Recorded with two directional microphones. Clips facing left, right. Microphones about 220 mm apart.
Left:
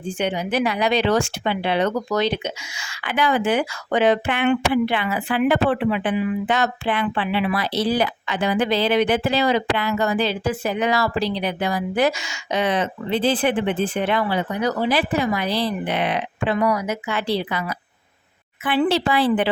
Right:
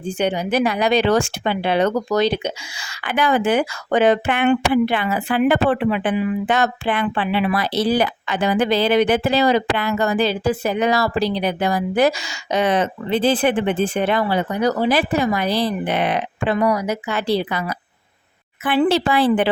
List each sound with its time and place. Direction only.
0.2 s speech: 40° right (ahead or behind)
16.6 s speech: 35° right (ahead or behind)